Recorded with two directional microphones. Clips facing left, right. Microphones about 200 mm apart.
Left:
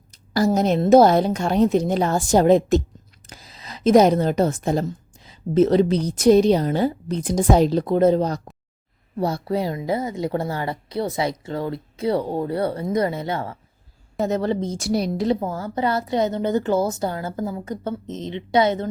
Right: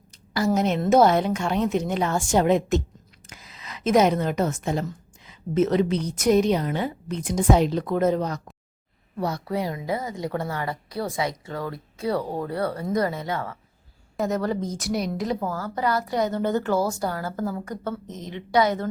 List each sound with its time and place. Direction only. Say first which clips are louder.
0.1 s a woman's voice: left 3 dB; 35° left (ahead or behind)